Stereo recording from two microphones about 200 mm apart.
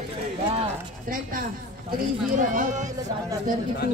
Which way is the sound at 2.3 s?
40° right (ahead or behind).